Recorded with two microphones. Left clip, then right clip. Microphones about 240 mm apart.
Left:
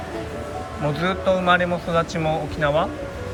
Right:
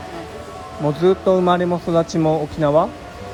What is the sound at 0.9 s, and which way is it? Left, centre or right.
Speech, right.